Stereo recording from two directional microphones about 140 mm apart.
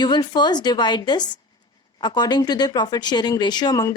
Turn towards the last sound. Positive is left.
turn(degrees=30)  # may be behind; listen again after turning